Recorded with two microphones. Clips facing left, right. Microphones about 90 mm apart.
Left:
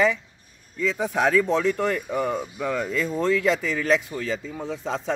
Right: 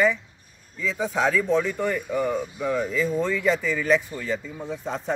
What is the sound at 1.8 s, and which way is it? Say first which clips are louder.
Speech: even; 80° left.